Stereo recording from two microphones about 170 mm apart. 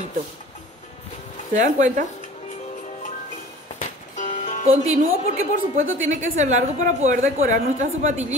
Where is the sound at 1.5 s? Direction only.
45° right (ahead or behind).